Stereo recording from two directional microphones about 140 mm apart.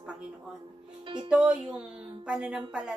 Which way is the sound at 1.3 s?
5° right (ahead or behind).